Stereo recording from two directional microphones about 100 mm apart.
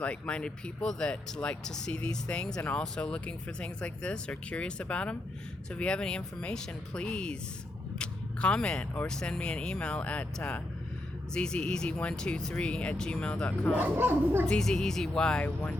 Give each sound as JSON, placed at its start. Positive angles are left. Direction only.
{"t": 0.0, "sound": "speech", "side_deg": 10}
{"t": 13.8, "sound": "speech", "side_deg": -20}
{"t": 14.4, "sound": "speech", "side_deg": 5}